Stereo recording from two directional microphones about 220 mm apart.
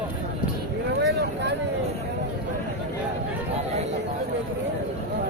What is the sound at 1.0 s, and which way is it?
Vehicle, 50° right (ahead or behind).